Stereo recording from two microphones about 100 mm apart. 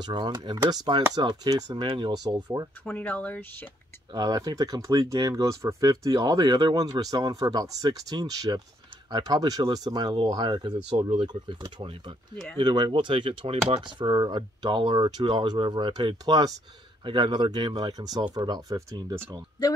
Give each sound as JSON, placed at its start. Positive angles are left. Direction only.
{"t": 0.0, "sound": "speech", "side_deg": -45}
{"t": 2.8, "sound": "speech", "side_deg": 15}
{"t": 4.1, "sound": "speech", "side_deg": -40}